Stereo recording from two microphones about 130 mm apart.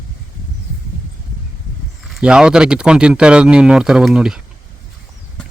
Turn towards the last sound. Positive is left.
turn(degrees=-5)  # may be behind; listen again after turning